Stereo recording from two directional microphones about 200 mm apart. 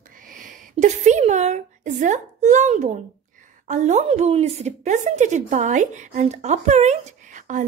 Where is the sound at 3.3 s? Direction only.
35° right (ahead or behind).